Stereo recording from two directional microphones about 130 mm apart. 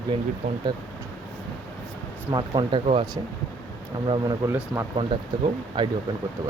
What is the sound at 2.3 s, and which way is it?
Speech, 35° right (ahead or behind).